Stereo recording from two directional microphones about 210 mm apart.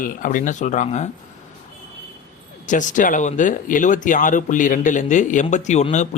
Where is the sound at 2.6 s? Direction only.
35° left (ahead or behind).